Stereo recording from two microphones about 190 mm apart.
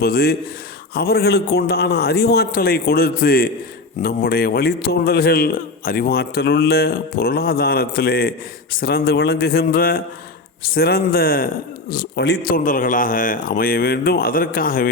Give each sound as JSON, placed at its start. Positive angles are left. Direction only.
{"t": 0.0, "sound": "a man's voice", "side_deg": 55}